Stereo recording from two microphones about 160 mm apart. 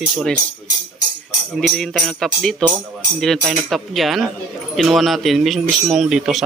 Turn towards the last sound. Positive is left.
turn(degrees=-5)  # may be behind; listen again after turning